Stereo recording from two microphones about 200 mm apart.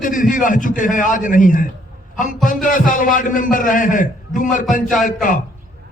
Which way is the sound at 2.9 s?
40° left (ahead or behind).